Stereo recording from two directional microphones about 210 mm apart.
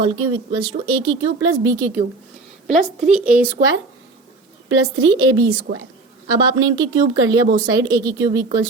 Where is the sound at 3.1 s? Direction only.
5° right (ahead or behind).